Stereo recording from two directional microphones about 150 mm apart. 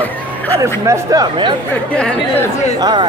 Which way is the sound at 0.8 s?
20° right (ahead or behind).